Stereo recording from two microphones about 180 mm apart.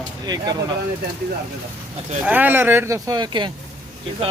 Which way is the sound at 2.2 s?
10° right (ahead or behind).